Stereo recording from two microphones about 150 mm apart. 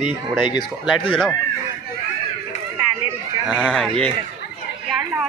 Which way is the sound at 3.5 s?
5° right (ahead or behind).